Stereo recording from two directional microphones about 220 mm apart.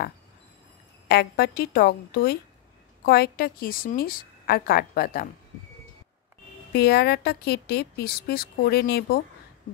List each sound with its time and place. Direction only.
1.0 s a woman's voice: 45° left (ahead or behind)
6.7 s a woman's voice: 45° left (ahead or behind)